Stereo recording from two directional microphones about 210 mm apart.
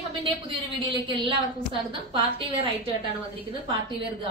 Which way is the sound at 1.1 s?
25° right (ahead or behind).